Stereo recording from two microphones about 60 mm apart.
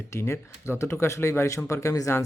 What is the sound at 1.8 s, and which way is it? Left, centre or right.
Speech, left.